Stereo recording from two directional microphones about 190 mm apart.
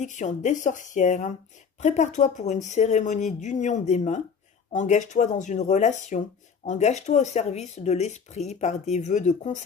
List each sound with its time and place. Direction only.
0.0 s speech: 40° left (ahead or behind)